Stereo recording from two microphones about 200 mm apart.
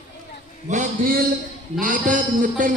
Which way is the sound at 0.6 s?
40° right (ahead or behind).